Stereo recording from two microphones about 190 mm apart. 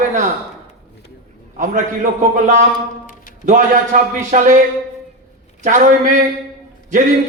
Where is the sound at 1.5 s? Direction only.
40° right (ahead or behind).